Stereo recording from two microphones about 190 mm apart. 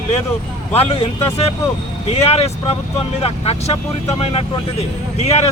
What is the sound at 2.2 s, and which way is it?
Speech, 35° left (ahead or behind).